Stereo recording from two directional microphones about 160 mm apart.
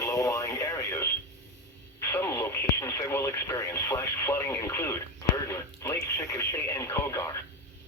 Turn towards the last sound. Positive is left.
turn(degrees=15)  # may be behind; listen again after turning